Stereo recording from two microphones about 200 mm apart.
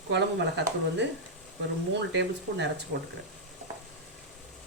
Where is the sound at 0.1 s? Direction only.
60° right (ahead or behind).